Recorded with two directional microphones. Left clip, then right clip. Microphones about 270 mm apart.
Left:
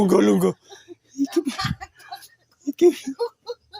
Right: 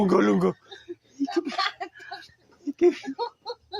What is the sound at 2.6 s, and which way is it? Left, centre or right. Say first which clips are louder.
Speech: left 4 dB; left.